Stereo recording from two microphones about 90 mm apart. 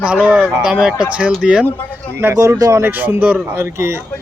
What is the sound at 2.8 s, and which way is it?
A man's voice, 20° right (ahead or behind).